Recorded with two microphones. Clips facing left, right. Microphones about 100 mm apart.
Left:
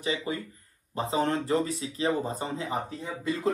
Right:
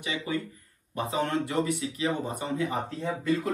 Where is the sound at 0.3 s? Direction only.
30° left (ahead or behind).